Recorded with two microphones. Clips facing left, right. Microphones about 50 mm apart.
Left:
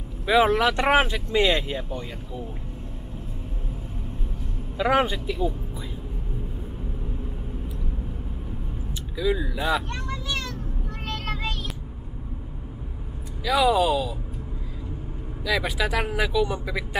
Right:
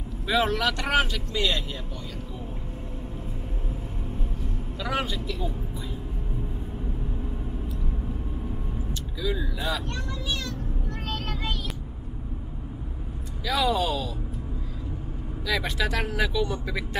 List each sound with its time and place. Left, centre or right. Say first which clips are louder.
0.3 s speech: left 5 dB; centre
4.7 s speech: left 8 dB; left
9.2 s speech: left 5 dB; centre
13.4 s speech: left 5 dB; centre
15.4 s speech: left 2 dB; centre